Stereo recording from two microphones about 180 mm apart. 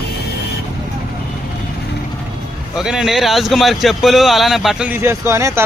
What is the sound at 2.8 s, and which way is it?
Speech, 5° right (ahead or behind).